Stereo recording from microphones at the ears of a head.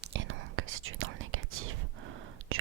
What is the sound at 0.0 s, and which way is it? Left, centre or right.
Whispering, right.